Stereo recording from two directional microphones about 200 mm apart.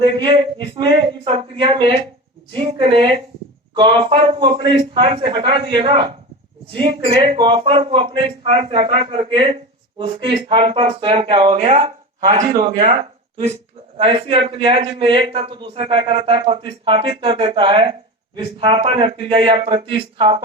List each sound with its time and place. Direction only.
0.2 s speech: 25° right (ahead or behind)